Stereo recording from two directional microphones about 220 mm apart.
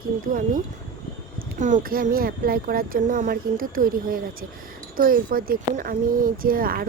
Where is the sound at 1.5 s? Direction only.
35° right (ahead or behind).